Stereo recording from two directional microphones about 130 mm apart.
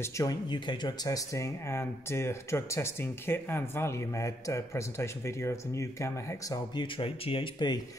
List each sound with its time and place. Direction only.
0.0 s speech: 25° left (ahead or behind)
6.7 s speech: 40° left (ahead or behind)